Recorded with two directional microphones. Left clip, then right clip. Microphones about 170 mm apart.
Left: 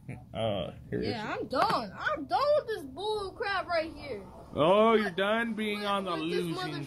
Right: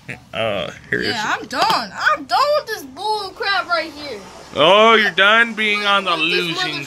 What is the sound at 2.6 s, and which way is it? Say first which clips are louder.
Speech: right 11 dB; 5° left (ahead or behind).